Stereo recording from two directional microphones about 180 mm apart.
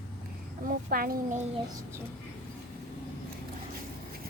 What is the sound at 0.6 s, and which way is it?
Speech, 55° right (ahead or behind).